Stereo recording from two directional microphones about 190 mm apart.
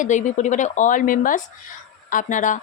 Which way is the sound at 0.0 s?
40° left (ahead or behind).